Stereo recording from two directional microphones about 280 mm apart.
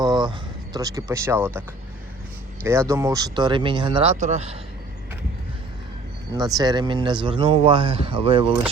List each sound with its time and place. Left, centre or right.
0.0 s a sound: centre
2.6 s speech: centre
6.3 s speech: centre